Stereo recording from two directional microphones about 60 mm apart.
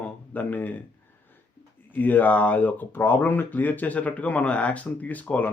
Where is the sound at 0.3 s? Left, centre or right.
Left.